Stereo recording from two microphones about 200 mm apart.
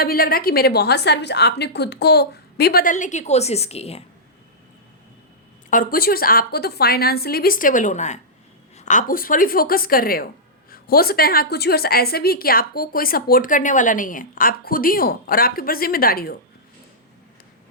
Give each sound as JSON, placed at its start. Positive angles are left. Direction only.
{"t": 0.0, "sound": "a woman's voice", "side_deg": 45}
{"t": 5.7, "sound": "a woman's voice", "side_deg": 45}